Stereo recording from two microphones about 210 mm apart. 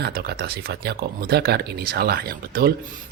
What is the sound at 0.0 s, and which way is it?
Speech, 50° right (ahead or behind).